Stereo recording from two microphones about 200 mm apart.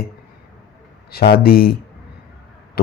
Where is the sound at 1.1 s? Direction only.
50° left (ahead or behind).